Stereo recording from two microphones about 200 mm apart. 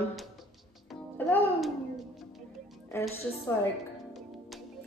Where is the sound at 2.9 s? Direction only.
10° left (ahead or behind).